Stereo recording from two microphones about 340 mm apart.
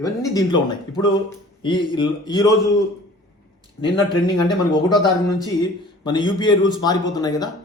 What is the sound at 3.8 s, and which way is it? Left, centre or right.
A man's voice, centre.